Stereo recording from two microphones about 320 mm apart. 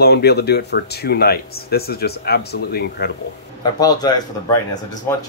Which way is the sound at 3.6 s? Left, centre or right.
Centre.